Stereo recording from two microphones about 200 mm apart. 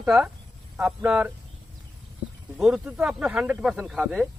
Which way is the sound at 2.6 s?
5° right (ahead or behind).